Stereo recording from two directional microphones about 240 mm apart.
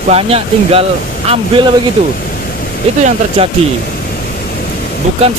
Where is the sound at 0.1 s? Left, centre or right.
Right.